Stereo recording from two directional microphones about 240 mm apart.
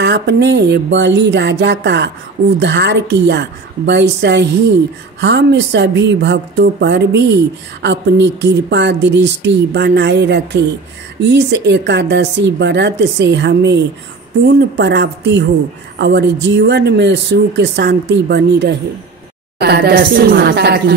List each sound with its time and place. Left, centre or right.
0.0 s a woman's voice: right